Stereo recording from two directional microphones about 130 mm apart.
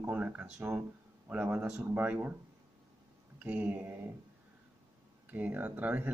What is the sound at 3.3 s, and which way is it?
Speech, 15° right (ahead or behind).